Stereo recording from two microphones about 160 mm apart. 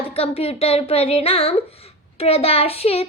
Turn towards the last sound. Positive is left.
turn(degrees=40)  # may be behind; listen again after turning